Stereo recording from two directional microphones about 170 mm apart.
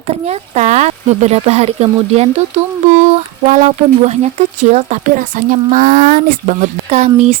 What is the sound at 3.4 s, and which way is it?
Speech, 45° right (ahead or behind).